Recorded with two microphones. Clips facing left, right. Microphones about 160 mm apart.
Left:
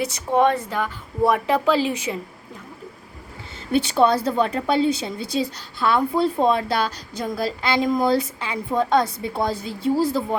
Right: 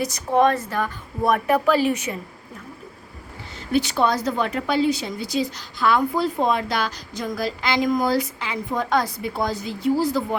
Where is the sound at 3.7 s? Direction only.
30° left (ahead or behind).